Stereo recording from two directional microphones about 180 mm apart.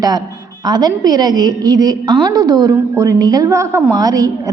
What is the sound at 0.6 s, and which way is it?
A woman's voice, 25° right (ahead or behind).